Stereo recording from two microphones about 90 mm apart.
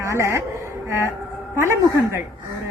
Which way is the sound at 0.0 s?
35° right (ahead or behind).